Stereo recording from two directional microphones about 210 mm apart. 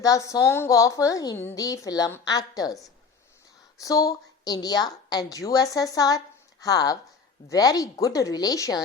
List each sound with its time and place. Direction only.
0.0 s a woman's voice: 15° left (ahead or behind)